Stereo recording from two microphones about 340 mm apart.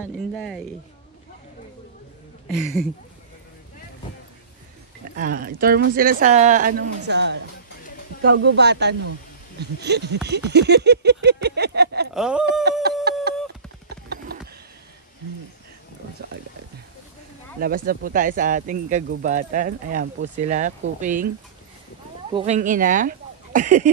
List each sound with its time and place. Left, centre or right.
0.0 s speech: centre
2.5 s speech: centre
5.1 s speech: right
10.5 s a sound: right
12.1 s speech: centre
13.1 s a sound: right
17.6 s speech: right
22.3 s speech: centre